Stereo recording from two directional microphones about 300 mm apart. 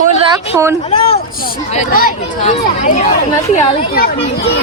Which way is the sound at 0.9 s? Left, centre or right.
Centre.